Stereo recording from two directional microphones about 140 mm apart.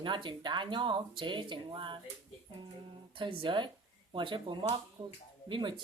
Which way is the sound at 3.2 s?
35° right (ahead or behind).